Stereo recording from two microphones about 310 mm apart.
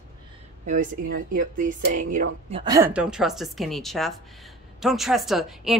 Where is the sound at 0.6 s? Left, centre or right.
Right.